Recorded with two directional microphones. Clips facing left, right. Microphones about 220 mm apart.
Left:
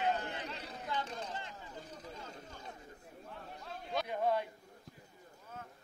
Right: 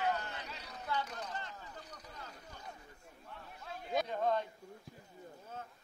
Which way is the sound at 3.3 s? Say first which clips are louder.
Left 1 dB; centre (ahead or behind).